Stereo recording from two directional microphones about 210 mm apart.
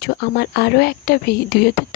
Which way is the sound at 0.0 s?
50° left (ahead or behind).